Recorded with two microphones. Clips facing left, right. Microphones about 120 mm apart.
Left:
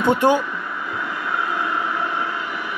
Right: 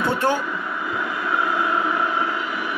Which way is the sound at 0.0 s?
15° left (ahead or behind).